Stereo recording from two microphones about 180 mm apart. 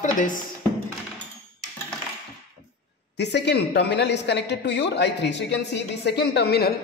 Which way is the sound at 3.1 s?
70° left (ahead or behind).